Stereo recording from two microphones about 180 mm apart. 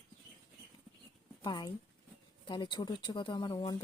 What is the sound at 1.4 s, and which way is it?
Speech, 20° left (ahead or behind).